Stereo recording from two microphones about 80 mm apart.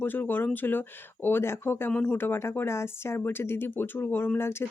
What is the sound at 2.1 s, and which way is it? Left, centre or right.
Speech, left.